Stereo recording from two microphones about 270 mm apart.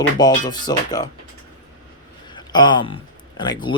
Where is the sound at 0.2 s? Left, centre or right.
Centre.